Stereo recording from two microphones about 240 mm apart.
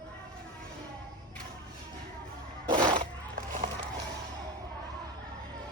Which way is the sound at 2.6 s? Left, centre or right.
Centre.